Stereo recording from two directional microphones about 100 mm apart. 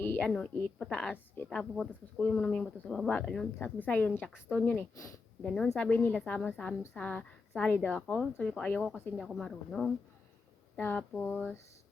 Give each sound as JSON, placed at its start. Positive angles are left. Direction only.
{"t": 0.0, "sound": "a sound", "side_deg": 20}
{"t": 0.3, "sound": "a woman's voice", "side_deg": 5}
{"t": 5.4, "sound": "speech", "side_deg": 5}
{"t": 5.9, "sound": "a woman's voice", "side_deg": 15}
{"t": 8.8, "sound": "speech", "side_deg": -5}
{"t": 10.8, "sound": "a woman's voice", "side_deg": 15}